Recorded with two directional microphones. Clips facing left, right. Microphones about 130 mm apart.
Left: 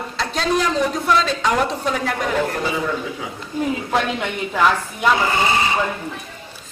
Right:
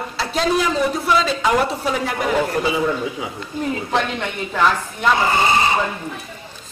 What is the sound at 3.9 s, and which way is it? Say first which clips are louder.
Speech: left 1 dB; 5° left (ahead or behind).